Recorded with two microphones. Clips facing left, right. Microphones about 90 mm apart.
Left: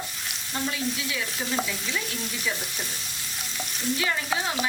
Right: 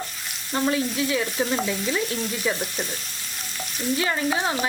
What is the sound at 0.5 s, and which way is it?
A woman's voice, 40° right (ahead or behind).